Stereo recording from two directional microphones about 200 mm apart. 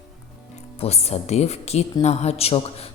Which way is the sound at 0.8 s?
30° left (ahead or behind).